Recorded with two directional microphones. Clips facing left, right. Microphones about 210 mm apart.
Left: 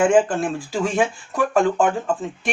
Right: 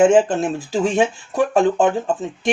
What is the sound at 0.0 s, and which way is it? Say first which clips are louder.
Speech: right 3 dB; 25° right (ahead or behind).